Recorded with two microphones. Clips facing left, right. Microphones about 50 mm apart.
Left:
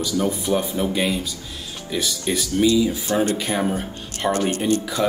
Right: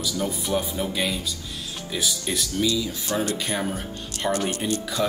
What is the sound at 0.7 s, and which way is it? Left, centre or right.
Speech, centre.